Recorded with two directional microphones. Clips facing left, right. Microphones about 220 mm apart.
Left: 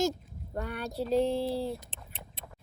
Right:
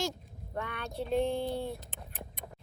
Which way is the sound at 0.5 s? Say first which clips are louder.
Left 3 dB; 35° left (ahead or behind).